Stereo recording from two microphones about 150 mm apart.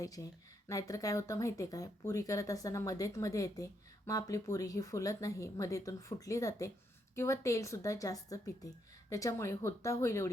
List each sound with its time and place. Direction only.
0.0 s speech: 25° left (ahead or behind)